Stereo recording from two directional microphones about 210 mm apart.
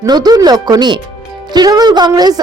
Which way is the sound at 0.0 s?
20° right (ahead or behind).